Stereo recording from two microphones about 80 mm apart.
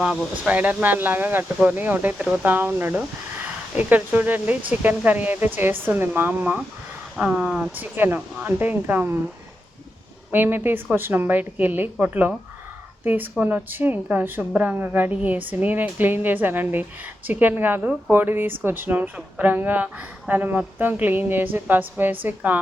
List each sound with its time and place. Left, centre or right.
0.0 s speech: centre
2.1 s speech: centre
2.4 s speech: right
7.8 s speech: right
10.3 s speech: right
13.4 s speech: right